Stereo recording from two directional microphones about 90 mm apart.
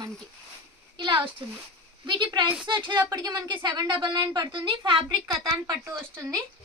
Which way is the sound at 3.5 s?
55° right (ahead or behind).